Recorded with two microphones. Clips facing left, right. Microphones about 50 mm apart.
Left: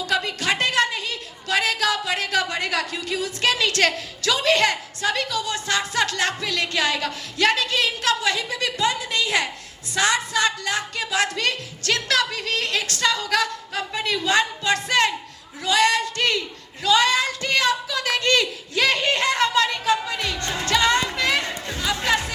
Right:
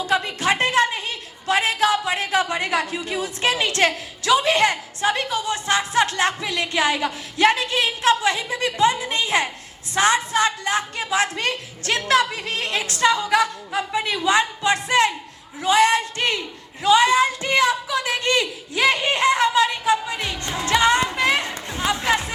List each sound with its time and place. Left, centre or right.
0.0 s a woman's voice: right